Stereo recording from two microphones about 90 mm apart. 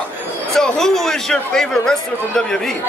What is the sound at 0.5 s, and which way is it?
Speech, 5° left (ahead or behind).